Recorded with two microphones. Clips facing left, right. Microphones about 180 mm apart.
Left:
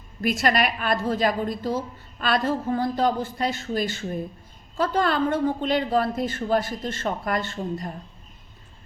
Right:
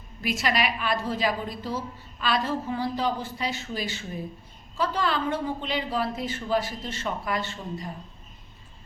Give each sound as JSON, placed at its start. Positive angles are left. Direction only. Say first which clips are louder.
{"t": 0.2, "sound": "a woman's voice", "louder": "left 4 dB", "side_deg": 50}